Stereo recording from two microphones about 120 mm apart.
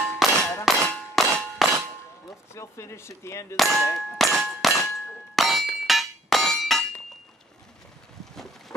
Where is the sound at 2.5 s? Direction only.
25° left (ahead or behind).